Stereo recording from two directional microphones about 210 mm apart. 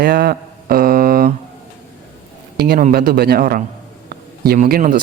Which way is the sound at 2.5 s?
50° right (ahead or behind).